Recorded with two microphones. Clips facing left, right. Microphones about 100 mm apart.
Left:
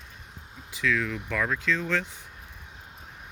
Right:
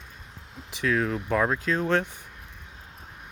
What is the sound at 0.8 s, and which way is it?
Speech, 40° right (ahead or behind).